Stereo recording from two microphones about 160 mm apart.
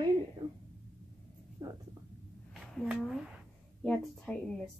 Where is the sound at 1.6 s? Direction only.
25° right (ahead or behind).